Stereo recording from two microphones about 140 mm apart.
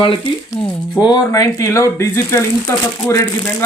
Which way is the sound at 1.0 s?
25° left (ahead or behind).